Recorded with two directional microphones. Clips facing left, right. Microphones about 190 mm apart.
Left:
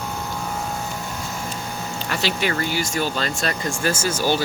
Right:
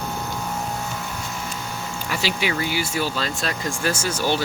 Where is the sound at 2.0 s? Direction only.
10° right (ahead or behind).